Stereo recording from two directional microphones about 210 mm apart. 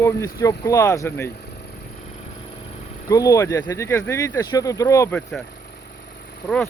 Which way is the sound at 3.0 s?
15° left (ahead or behind).